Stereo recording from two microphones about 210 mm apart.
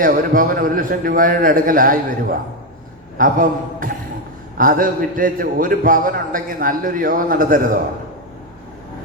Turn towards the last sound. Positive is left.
turn(degrees=-40)  # may be behind; listen again after turning